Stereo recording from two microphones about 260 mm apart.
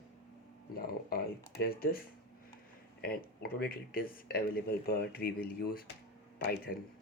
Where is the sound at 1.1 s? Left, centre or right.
Left.